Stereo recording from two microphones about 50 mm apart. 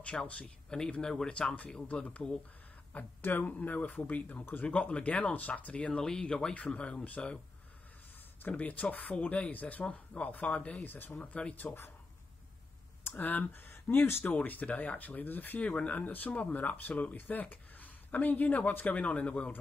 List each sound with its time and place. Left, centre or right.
0.3 s a man's voice: centre
1.9 s speech: left
3.2 s speech: left
8.4 s speech: left
10.9 s speech: left
11.1 s speech: left
11.6 s speech: left
13.1 s speech: left
14.2 s speech: left
15.6 s speech: left